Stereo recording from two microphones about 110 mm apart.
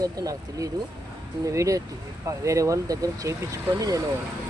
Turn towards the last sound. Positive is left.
turn(degrees=-35)  # may be behind; listen again after turning